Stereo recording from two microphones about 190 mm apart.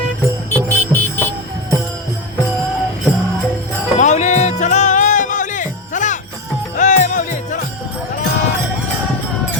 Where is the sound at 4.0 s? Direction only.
40° left (ahead or behind).